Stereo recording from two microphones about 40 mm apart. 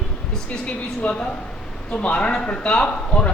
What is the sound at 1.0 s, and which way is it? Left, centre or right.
A man's voice, left.